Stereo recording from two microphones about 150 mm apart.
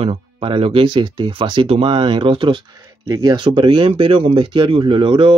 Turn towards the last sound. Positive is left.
turn(degrees=-35)  # may be behind; listen again after turning